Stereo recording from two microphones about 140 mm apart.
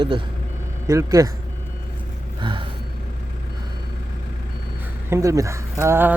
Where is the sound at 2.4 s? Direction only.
35° right (ahead or behind).